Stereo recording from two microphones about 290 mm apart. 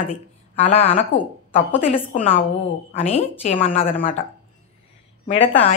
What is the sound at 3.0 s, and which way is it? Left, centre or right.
Speech, left.